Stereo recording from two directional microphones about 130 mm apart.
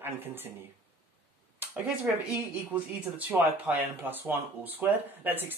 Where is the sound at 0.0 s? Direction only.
15° right (ahead or behind).